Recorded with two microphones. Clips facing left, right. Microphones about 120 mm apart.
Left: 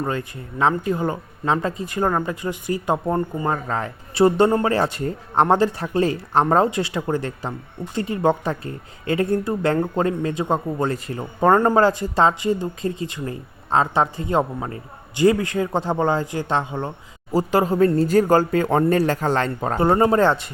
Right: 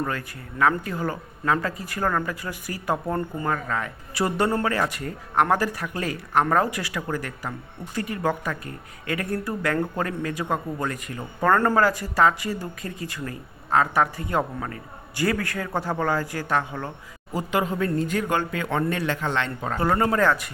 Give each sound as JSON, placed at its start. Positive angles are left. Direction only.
{"t": 0.0, "sound": "speech", "side_deg": 25}
{"t": 17.3, "sound": "speech", "side_deg": 35}
{"t": 19.8, "sound": "speech", "side_deg": 25}